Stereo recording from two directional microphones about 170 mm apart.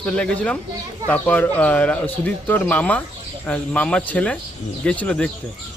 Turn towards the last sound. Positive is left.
turn(degrees=5)  # may be behind; listen again after turning